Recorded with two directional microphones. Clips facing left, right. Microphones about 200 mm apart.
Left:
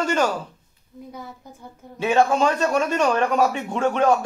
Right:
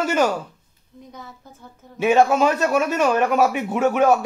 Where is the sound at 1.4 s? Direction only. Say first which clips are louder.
Left 2 dB; 15° left (ahead or behind).